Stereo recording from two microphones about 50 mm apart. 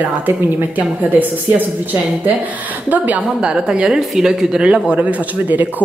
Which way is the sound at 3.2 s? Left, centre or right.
Centre.